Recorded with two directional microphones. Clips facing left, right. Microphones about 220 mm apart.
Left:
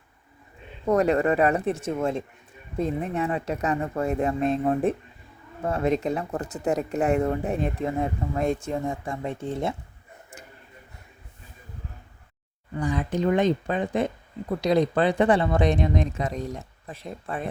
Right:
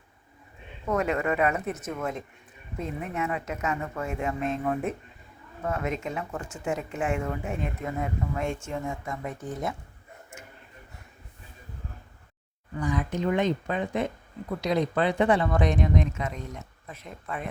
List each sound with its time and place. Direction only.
0.9 s speech: 35° left (ahead or behind)
12.8 s speech: 30° left (ahead or behind)